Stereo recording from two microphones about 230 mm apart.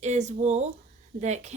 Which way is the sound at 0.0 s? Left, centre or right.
Right.